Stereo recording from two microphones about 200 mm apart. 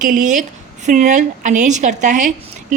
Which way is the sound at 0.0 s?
40° right (ahead or behind).